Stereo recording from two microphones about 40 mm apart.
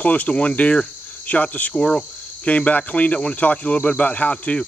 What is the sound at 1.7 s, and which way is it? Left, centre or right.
Cricket, left.